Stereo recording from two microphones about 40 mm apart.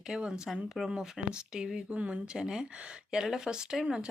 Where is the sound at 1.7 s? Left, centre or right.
Right.